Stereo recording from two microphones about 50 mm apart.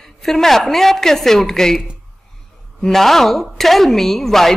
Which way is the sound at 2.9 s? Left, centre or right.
Centre.